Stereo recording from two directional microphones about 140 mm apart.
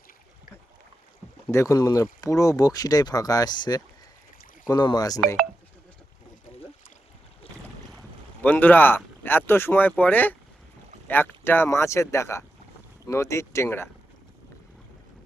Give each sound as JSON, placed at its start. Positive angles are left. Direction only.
{"t": 1.5, "sound": "speech", "side_deg": 20}
{"t": 8.4, "sound": "speech", "side_deg": 10}